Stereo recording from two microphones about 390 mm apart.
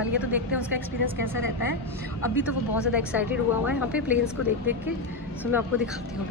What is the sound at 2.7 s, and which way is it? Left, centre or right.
Speech, centre.